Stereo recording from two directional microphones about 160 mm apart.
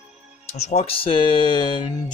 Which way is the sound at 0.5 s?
40° left (ahead or behind).